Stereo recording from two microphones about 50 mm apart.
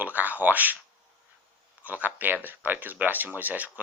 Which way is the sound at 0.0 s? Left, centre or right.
Right.